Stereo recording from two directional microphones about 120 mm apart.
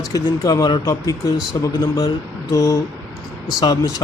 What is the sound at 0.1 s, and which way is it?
Speech, 30° left (ahead or behind).